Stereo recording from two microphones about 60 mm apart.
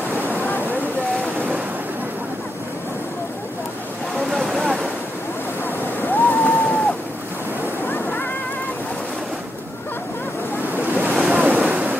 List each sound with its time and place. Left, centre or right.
4.3 s boat: centre
6.0 s boat: left
7.9 s a sound: left
10.7 s waves: right